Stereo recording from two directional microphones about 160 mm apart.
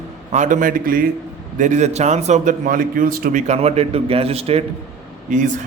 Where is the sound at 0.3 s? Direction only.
50° right (ahead or behind).